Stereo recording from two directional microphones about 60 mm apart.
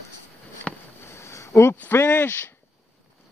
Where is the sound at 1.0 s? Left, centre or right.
Left.